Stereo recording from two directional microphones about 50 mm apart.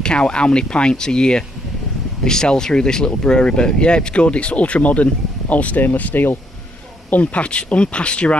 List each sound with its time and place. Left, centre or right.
0.0 s speech: centre